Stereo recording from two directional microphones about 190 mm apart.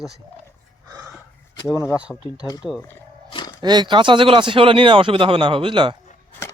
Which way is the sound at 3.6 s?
20° right (ahead or behind).